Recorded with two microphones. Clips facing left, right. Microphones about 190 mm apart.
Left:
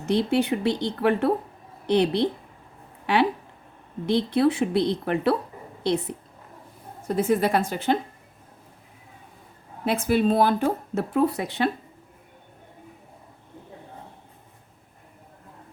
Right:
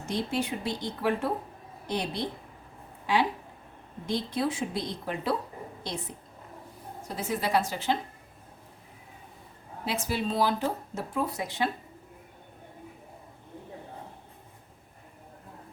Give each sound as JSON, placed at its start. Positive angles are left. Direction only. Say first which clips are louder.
{"t": 0.0, "sound": "a woman's voice", "louder": "left 8 dB", "side_deg": 65}
{"t": 9.8, "sound": "speech", "louder": "left 9 dB", "side_deg": 55}